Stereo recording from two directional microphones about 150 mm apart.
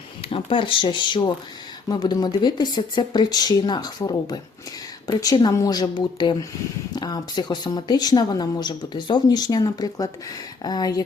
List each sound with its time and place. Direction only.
0.3 s speech: 35° left (ahead or behind)